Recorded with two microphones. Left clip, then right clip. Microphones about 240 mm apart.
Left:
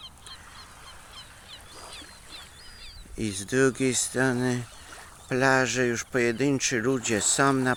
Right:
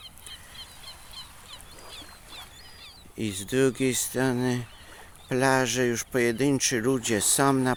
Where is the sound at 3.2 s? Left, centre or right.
Centre.